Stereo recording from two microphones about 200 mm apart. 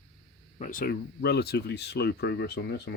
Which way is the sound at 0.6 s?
45° left (ahead or behind).